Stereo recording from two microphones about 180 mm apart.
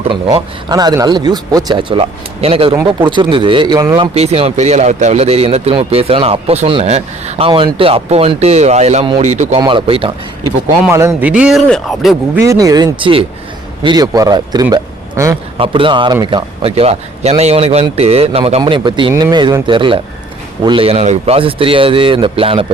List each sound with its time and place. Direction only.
0.1 s speech: 25° right (ahead or behind)
9.6 s speech: 25° right (ahead or behind)
10.8 s speech: 15° right (ahead or behind)
12.4 s speech: 20° right (ahead or behind)
15.5 s speech: 30° right (ahead or behind)